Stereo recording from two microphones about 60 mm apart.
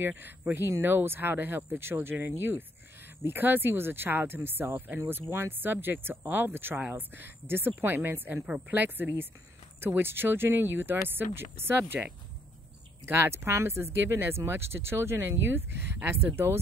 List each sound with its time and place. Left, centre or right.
0.0 s speech: right
0.6 s speech: right